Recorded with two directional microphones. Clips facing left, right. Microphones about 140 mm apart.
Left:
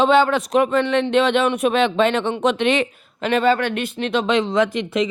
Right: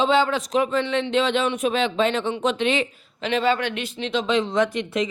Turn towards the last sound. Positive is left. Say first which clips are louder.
# left 3 dB
turn(degrees=90)